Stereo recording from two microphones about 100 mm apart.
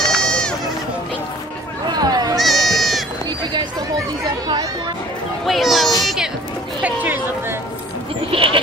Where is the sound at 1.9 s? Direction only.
40° right (ahead or behind).